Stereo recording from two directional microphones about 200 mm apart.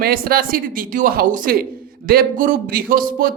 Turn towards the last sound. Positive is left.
turn(degrees=-45)  # may be behind; listen again after turning